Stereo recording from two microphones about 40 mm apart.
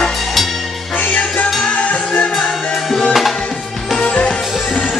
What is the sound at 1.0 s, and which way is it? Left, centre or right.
Music, left.